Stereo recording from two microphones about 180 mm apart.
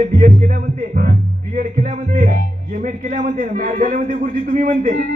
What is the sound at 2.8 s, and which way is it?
Speech, 45° right (ahead or behind).